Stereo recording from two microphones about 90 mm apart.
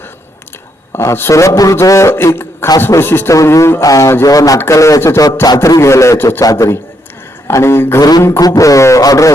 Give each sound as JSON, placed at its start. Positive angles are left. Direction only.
{"t": 0.9, "sound": "a man's voice", "side_deg": 25}
{"t": 6.4, "sound": "a man's voice", "side_deg": 40}
{"t": 7.4, "sound": "a sound", "side_deg": 30}
{"t": 8.4, "sound": "a man's voice", "side_deg": 40}